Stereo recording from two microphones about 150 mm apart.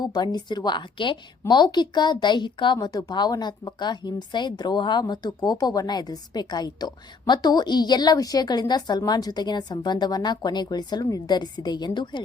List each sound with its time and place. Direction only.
0.0 s a woman's voice: 30° left (ahead or behind)